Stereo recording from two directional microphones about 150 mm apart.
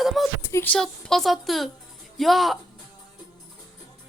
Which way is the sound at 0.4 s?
15° left (ahead or behind).